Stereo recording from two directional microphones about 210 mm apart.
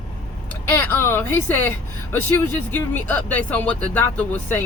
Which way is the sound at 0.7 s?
10° left (ahead or behind).